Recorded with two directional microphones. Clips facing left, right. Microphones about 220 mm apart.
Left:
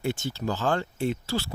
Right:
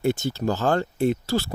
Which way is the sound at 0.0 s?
40° right (ahead or behind).